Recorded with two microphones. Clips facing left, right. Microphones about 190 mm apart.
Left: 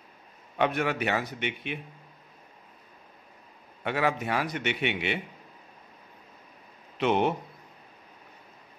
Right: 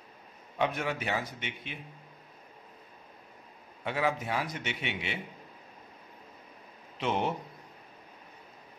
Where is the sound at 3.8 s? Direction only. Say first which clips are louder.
Left 3 dB; 70° left (ahead or behind).